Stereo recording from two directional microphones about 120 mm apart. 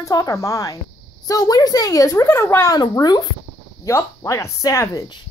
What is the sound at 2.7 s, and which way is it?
Speech, 35° left (ahead or behind).